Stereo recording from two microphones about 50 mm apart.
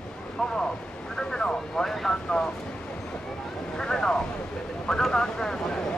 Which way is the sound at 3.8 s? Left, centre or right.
Centre.